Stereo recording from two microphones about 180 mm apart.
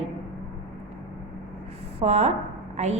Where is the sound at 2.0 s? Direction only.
35° right (ahead or behind).